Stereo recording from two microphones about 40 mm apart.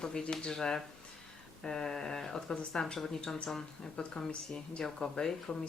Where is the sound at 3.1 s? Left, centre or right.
Left.